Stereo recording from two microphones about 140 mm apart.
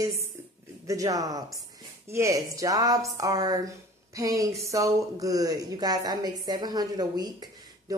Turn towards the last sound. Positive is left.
turn(degrees=-30)  # may be behind; listen again after turning